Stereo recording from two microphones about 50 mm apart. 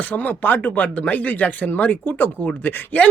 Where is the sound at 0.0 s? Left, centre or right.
Left.